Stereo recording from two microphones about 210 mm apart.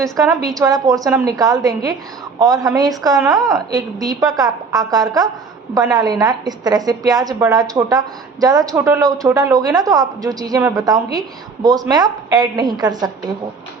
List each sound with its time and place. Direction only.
0.2 s a woman's voice: 15° right (ahead or behind)